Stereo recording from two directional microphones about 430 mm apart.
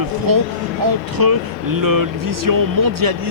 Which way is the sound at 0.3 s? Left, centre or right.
Right.